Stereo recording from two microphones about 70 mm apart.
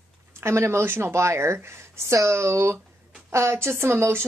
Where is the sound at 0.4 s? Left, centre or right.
Right.